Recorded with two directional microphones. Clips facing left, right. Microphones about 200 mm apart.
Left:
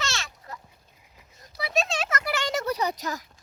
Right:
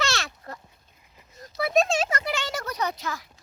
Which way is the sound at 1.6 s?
50° right (ahead or behind).